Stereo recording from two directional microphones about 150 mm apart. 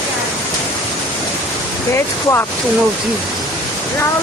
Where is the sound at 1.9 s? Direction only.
15° left (ahead or behind).